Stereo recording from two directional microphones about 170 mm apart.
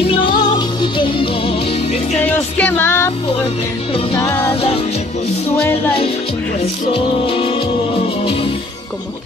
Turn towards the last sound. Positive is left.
turn(degrees=30)  # may be behind; listen again after turning